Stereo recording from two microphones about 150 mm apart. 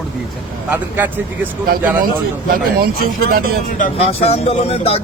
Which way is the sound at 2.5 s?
80° right.